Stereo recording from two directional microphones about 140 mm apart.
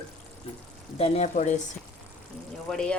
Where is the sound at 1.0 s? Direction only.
50° left (ahead or behind).